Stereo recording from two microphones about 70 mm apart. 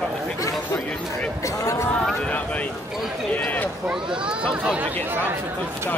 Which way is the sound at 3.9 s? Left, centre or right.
Centre.